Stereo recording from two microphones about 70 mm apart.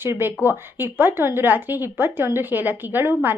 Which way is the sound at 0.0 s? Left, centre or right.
Right.